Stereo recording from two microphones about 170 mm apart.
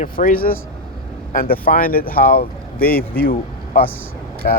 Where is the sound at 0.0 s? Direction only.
50° left (ahead or behind).